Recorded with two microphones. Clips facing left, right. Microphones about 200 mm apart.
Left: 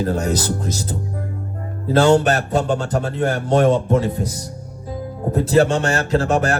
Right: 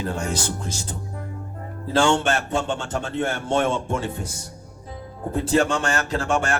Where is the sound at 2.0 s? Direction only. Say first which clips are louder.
Left 6 dB; 35° left (ahead or behind).